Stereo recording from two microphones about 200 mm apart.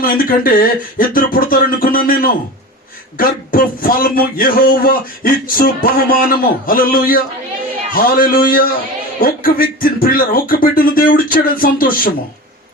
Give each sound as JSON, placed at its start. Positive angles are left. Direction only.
{"t": 0.0, "sound": "speech", "side_deg": 45}